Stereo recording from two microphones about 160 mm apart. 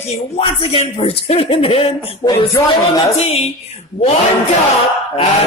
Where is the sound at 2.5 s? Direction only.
20° left (ahead or behind).